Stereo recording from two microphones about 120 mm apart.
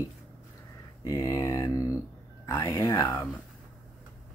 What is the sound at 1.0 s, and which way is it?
Speech, 30° left (ahead or behind).